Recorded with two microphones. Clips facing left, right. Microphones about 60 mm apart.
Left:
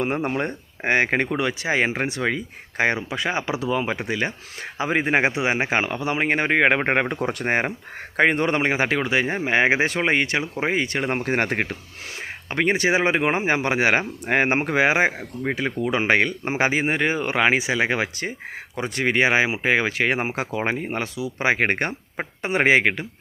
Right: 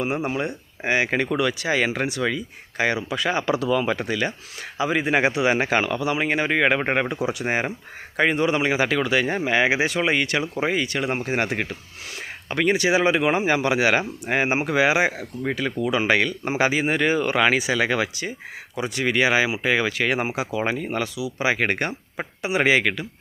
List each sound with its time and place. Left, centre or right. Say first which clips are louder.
0.0 s speech: left 1 dB; left
1.3 s speech: right 1 dB; left
4.8 s speech: even; left
11.1 s speech: left 1 dB; left
12.5 s speech: even; left
14.3 s speech: left 2 dB; left